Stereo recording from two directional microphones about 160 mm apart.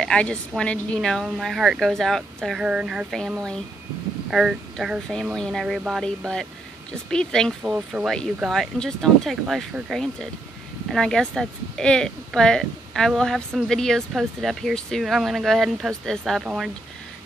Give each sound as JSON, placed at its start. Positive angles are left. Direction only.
{"t": 0.0, "sound": "speech", "side_deg": 5}
{"t": 7.6, "sound": "speech", "side_deg": -5}